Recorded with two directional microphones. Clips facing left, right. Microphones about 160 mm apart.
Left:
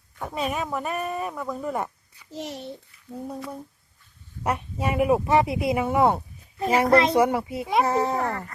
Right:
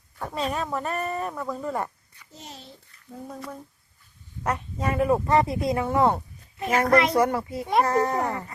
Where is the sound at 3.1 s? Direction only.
10° left (ahead or behind).